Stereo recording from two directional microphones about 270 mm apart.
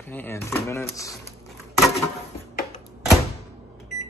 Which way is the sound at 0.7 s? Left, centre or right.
Centre.